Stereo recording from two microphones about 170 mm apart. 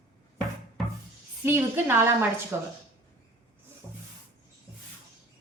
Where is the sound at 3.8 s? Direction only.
15° right (ahead or behind).